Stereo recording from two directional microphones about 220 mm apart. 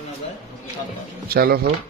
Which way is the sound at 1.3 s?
45° right (ahead or behind).